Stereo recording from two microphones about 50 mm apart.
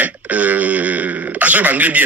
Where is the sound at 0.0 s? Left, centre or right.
Right.